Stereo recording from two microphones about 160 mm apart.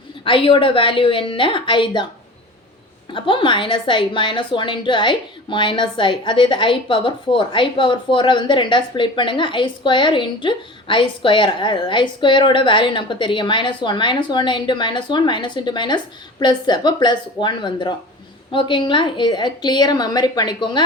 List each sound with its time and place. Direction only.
0.3 s a woman's voice: 35° left (ahead or behind)
3.1 s a woman's voice: 30° left (ahead or behind)